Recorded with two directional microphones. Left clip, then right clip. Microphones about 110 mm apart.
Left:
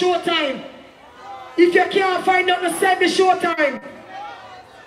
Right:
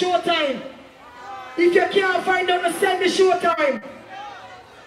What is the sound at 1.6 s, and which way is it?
Speech, 35° left (ahead or behind).